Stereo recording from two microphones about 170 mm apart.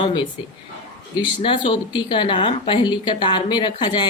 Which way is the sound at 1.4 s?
30° left (ahead or behind).